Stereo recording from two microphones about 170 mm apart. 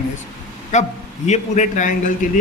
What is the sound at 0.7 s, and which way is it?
Speech, 45° left (ahead or behind).